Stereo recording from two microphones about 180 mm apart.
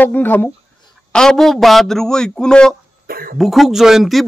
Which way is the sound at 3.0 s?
55° right (ahead or behind).